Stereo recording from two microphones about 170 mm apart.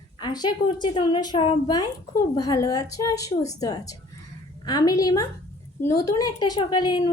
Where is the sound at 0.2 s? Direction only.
25° left (ahead or behind).